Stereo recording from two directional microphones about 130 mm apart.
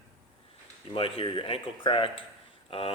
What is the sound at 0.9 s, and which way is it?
Speech, 45° left (ahead or behind).